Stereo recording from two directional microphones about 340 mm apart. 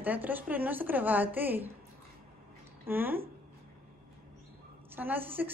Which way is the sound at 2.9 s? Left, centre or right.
Centre.